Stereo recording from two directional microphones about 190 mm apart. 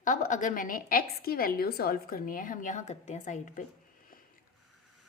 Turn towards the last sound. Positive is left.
turn(degrees=40)  # may be behind; listen again after turning